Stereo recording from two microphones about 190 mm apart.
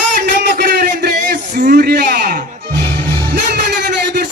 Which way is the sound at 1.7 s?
60° right (ahead or behind).